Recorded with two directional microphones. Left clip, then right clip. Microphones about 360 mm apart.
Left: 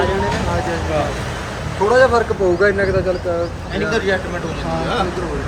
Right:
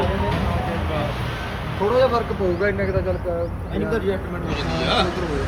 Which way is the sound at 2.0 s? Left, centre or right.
Left.